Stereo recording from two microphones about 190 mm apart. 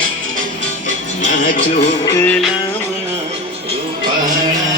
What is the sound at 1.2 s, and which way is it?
Music, 45° left (ahead or behind).